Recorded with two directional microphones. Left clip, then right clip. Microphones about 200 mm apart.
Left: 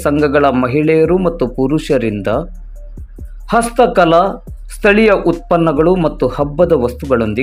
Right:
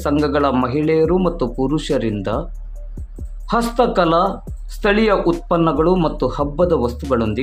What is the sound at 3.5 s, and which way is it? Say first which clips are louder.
Speech: left 5 dB; 15° left (ahead or behind).